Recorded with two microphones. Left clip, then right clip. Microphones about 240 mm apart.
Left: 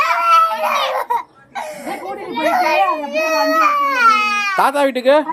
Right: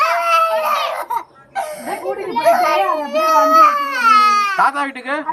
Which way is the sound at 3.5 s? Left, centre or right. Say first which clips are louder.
Right 3 dB; centre.